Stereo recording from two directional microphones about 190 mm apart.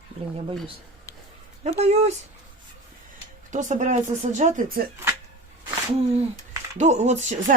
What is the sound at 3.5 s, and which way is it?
Speech, 40° right (ahead or behind).